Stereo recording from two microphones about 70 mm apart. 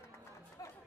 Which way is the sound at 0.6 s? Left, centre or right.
Left.